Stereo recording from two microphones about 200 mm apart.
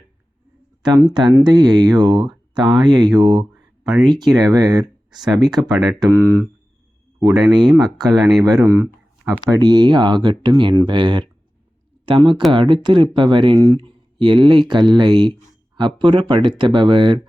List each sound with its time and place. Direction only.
0.8 s speech: 20° right (ahead or behind)